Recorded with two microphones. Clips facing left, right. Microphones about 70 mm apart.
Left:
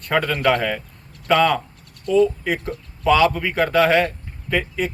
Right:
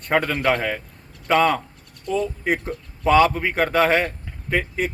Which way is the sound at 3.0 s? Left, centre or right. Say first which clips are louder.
Even; right.